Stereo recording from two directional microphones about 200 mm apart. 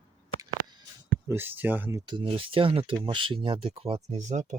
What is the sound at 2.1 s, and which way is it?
Speech, 25° right (ahead or behind).